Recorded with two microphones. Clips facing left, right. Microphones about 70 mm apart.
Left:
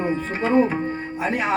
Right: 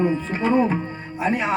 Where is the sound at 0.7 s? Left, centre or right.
Left.